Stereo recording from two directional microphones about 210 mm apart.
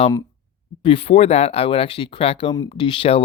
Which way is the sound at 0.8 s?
25° left (ahead or behind).